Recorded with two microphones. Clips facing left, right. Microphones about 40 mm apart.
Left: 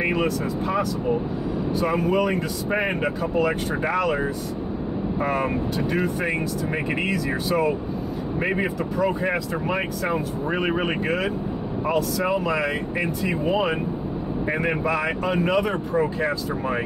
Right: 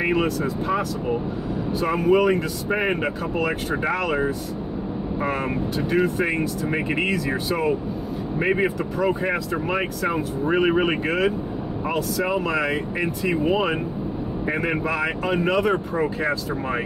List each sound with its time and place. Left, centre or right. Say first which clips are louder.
0.0 s speech: right 1 dB; centre